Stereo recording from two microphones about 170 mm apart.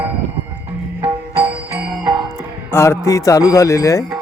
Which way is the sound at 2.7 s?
15° left (ahead or behind).